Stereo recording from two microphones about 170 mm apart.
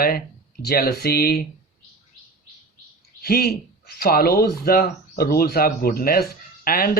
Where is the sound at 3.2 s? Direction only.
65° left (ahead or behind).